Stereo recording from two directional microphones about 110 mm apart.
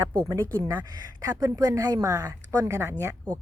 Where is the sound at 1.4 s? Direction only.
35° right (ahead or behind).